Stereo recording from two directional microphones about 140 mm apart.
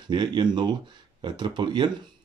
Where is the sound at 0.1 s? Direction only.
35° right (ahead or behind).